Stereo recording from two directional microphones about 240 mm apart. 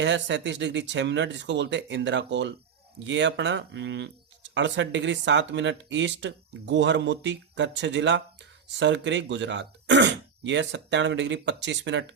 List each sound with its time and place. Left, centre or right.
0.0 s speech: right